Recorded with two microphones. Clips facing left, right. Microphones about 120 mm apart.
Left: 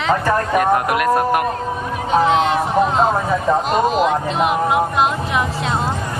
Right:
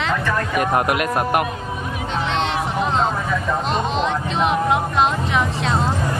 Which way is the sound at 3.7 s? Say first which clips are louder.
Left 4 dB; 5° left (ahead or behind).